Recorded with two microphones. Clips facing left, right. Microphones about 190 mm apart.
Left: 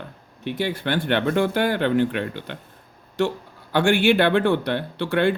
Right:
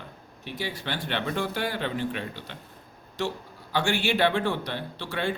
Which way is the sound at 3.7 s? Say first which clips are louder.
Left 8 dB; 55° left (ahead or behind).